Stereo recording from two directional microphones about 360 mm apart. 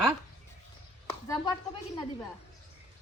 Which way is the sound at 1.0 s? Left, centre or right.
Centre.